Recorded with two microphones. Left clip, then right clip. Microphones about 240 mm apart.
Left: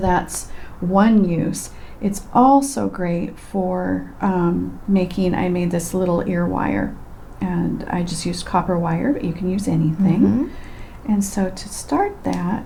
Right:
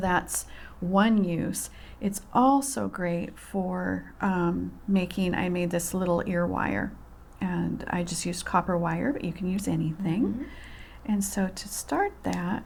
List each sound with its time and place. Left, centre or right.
0.0 s speech: right